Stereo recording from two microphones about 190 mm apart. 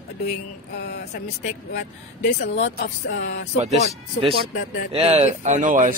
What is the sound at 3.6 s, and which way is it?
A man's voice, 35° right (ahead or behind).